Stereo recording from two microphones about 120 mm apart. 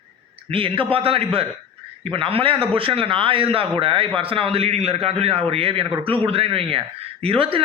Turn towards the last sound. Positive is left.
turn(degrees=-50)  # may be behind; listen again after turning